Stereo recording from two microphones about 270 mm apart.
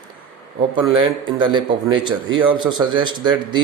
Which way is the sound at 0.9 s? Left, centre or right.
Centre.